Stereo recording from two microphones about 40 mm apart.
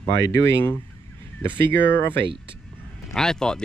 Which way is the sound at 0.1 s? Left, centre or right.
Left.